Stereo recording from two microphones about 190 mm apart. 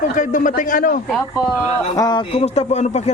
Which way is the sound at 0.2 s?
45° left (ahead or behind).